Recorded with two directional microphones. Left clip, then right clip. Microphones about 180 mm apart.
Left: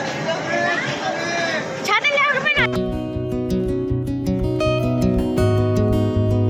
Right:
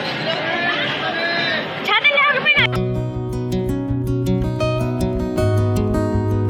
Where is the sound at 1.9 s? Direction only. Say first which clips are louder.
Right 2 dB; 15° left (ahead or behind).